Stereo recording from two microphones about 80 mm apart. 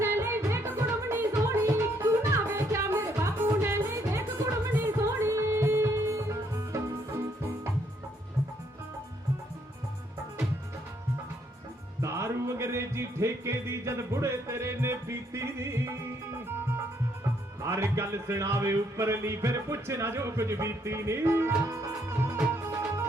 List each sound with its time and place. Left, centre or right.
0.0 s music: right
12.0 s music: right
17.6 s speech: right